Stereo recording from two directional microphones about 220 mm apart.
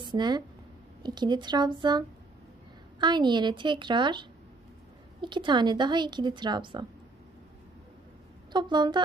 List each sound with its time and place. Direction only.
0.0 s speech: 20° right (ahead or behind)
8.5 s speech: 20° right (ahead or behind)